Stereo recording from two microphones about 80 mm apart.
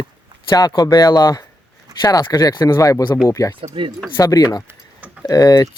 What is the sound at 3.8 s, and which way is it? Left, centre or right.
Speech, right.